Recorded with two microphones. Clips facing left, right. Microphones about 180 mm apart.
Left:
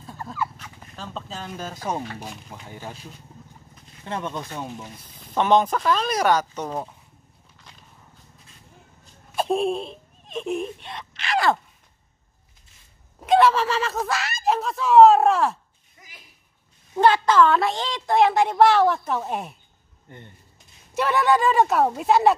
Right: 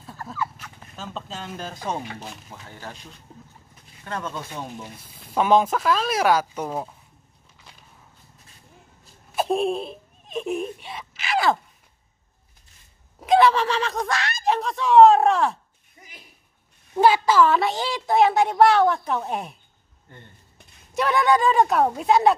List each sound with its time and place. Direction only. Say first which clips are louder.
0.6 s speech: even; centre (ahead or behind); by 4.5 s 20° left (ahead or behind)
4.8 s a woman's voice: even; 5° right (ahead or behind)
9.0 s a sound: right 1 dB; 5° right (ahead or behind)
13.2 s speech: even; centre (ahead or behind)
16.9 s a woman's voice: even; 5° right (ahead or behind)
20.9 s a woman's voice: even; centre (ahead or behind)